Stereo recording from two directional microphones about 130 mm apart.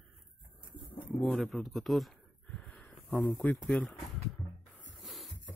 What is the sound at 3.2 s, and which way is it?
Speech, 10° left (ahead or behind).